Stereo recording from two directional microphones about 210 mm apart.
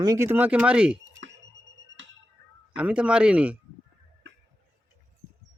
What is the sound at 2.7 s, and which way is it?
Speech, 5° right (ahead or behind).